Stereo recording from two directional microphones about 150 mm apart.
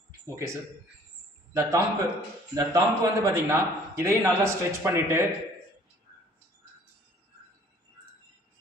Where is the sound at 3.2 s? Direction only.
20° right (ahead or behind).